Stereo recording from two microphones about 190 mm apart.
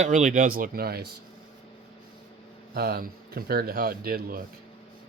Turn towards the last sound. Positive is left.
turn(degrees=-50)  # may be behind; listen again after turning